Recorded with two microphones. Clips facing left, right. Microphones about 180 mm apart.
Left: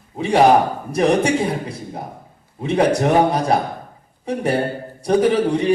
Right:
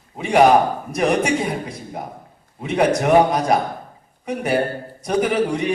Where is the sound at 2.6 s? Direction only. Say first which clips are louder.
Left 1 dB; 30° left (ahead or behind).